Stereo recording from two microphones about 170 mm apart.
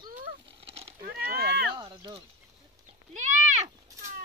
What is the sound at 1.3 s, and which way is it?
Speech, 65° right (ahead or behind).